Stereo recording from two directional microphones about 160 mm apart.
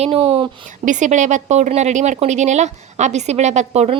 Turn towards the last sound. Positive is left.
turn(degrees=-45)  # may be behind; listen again after turning